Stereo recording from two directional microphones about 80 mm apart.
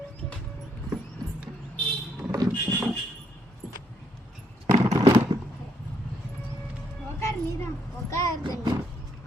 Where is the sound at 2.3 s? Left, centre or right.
Right.